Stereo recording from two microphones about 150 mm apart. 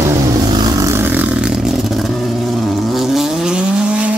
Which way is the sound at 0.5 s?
30° right (ahead or behind).